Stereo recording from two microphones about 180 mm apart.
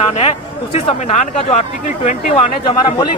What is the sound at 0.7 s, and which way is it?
Speech, 35° left (ahead or behind).